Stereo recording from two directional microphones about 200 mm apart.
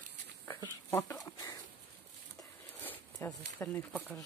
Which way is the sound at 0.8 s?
15° left (ahead or behind).